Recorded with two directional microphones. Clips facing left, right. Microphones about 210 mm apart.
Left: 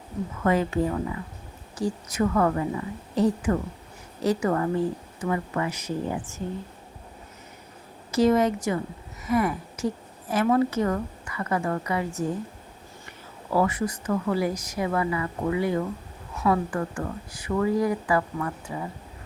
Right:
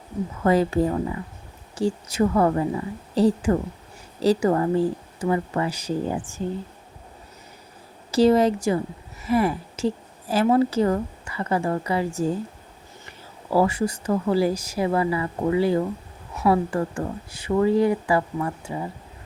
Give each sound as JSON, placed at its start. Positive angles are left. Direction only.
{"t": 0.4, "sound": "a woman's voice", "side_deg": -35}
{"t": 8.1, "sound": "a woman's voice", "side_deg": -30}